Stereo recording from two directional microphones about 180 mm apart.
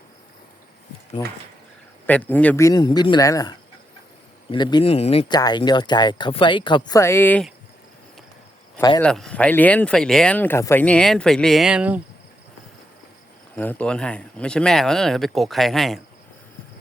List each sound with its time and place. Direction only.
1.2 s speech: 25° left (ahead or behind)
2.0 s speech: 10° left (ahead or behind)
9.0 s speech: 5° left (ahead or behind)
13.6 s speech: 10° left (ahead or behind)